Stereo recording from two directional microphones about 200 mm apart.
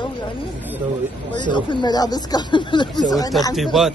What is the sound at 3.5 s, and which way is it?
Speech, centre (ahead or behind).